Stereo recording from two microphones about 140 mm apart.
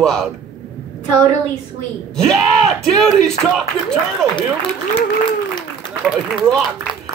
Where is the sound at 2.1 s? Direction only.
Centre (ahead or behind).